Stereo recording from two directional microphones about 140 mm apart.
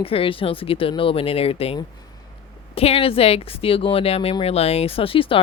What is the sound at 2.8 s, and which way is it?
Speech, 45° left (ahead or behind).